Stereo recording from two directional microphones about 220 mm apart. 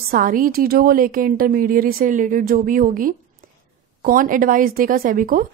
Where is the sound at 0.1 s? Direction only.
40° right (ahead or behind).